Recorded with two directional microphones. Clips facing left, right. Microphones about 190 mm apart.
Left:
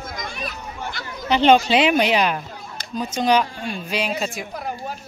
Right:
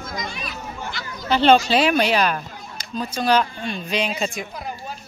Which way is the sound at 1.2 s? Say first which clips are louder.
Even; 15° left (ahead or behind).